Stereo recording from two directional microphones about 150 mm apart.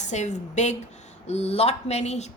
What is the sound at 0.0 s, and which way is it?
A woman's voice, 50° left (ahead or behind).